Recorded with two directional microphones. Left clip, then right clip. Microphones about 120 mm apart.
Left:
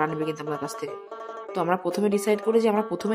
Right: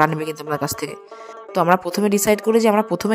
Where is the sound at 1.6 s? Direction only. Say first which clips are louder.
Right 7 dB; 40° right (ahead or behind).